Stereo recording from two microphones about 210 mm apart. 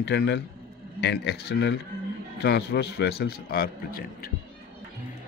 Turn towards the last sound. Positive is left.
turn(degrees=45)  # may be behind; listen again after turning